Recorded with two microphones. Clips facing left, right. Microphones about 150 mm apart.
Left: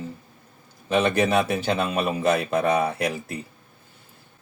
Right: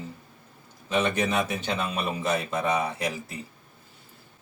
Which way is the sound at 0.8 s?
65° left (ahead or behind).